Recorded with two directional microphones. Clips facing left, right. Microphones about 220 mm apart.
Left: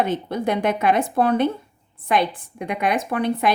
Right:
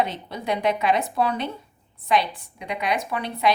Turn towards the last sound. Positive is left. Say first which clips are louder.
# left 3 dB
turn(degrees=50)  # may be behind; listen again after turning